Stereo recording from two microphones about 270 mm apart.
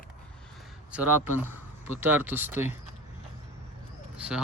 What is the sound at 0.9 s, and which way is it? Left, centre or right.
Speech, centre.